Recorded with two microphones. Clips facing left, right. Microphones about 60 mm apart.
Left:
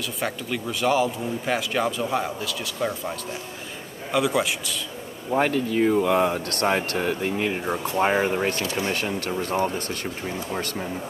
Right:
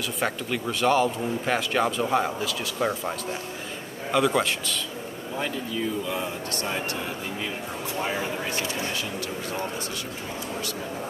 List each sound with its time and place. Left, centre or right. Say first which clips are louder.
0.2 s a man's voice: right 1 dB; centre
5.3 s a man's voice: left 9 dB; left